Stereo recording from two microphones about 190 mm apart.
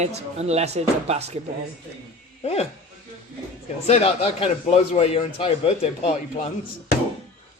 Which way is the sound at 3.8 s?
30° left (ahead or behind).